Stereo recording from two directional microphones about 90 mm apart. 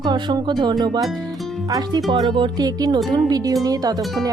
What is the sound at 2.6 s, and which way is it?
Speech, 45° right (ahead or behind).